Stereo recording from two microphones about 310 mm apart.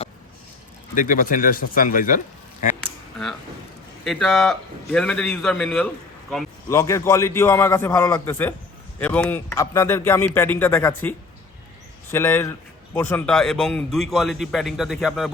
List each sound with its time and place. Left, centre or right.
0.9 s speech: left
2.8 s a sound: centre
4.0 s a man's voice: centre
12.1 s speech: centre